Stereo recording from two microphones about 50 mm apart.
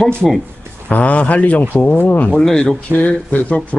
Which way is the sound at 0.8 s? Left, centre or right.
Left.